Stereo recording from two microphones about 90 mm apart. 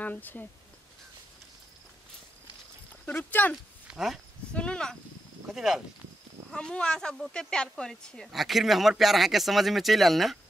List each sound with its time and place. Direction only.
0.0 s speech: 20° left (ahead or behind)
3.1 s speech: 20° left (ahead or behind)
3.8 s speech: 5° right (ahead or behind)
4.6 s speech: 10° left (ahead or behind)
5.5 s speech: 5° right (ahead or behind)
6.5 s speech: 10° left (ahead or behind)